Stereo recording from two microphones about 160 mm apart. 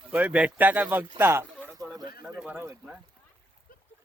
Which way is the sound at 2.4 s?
5° right (ahead or behind).